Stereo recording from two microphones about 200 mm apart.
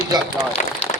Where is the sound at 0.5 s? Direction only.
30° left (ahead or behind).